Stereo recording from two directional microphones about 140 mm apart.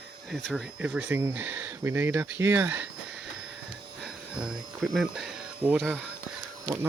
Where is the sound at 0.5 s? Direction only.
5° right (ahead or behind).